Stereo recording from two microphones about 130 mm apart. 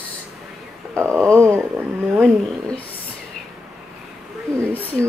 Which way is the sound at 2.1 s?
5° left (ahead or behind).